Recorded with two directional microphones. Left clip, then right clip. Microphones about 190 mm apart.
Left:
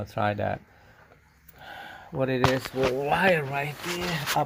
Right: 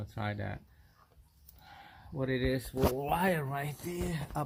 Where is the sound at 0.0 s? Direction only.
20° left (ahead or behind).